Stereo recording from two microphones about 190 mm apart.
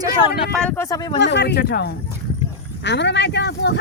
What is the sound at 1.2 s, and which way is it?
Speech, 65° left (ahead or behind).